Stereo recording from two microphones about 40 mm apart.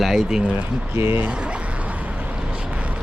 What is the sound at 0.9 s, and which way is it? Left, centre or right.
Speech, right.